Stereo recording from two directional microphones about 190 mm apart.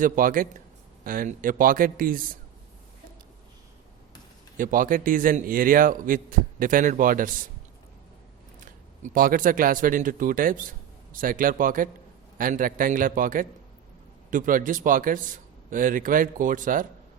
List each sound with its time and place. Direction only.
0.0 s a man's voice: 45° right (ahead or behind)
4.5 s a man's voice: 45° right (ahead or behind)
9.1 s a man's voice: 45° right (ahead or behind)